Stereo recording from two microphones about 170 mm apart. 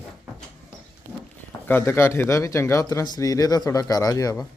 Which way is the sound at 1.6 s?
10° left (ahead or behind).